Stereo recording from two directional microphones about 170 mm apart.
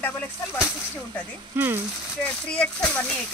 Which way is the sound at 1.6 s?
15° right (ahead or behind).